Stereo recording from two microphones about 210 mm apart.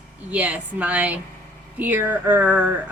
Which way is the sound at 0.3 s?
5° right (ahead or behind).